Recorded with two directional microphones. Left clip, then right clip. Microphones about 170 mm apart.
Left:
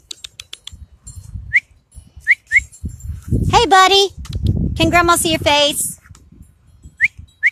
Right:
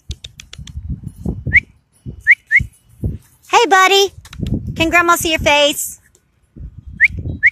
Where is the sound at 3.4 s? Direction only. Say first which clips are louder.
Even; 5° left (ahead or behind).